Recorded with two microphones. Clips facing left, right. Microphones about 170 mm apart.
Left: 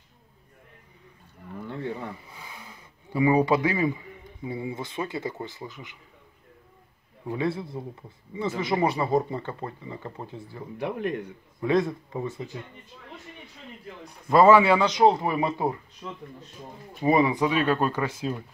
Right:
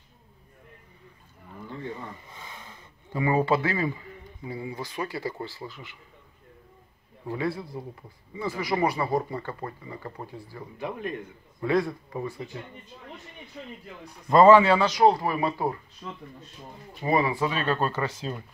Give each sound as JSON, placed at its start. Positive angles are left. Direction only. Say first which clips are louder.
{"t": 2.2, "sound": "speech", "louder": "even", "side_deg": 10}
{"t": 7.2, "sound": "speech", "louder": "left 2 dB", "side_deg": 20}
{"t": 10.8, "sound": "speech", "louder": "left 4 dB", "side_deg": 70}
{"t": 11.6, "sound": "speech", "louder": "left 1 dB", "side_deg": 20}
{"t": 14.3, "sound": "speech", "louder": "right 1 dB", "side_deg": 10}
{"t": 17.0, "sound": "speech", "louder": "left 3 dB", "side_deg": 20}